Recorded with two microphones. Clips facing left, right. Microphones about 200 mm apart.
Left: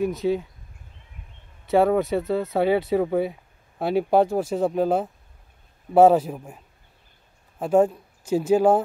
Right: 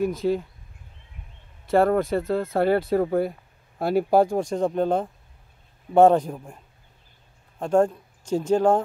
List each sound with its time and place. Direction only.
0.0 s speech: 5° left (ahead or behind)
1.7 s speech: 5° left (ahead or behind)